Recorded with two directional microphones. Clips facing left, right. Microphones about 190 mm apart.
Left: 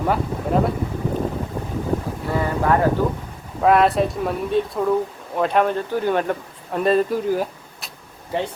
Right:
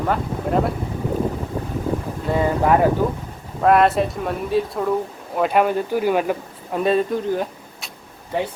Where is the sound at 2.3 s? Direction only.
15° right (ahead or behind).